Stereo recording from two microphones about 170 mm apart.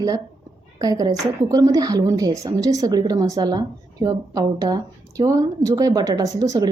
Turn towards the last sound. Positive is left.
turn(degrees=-20)  # may be behind; listen again after turning